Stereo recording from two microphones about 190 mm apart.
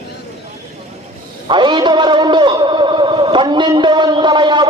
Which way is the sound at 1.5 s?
25° right (ahead or behind).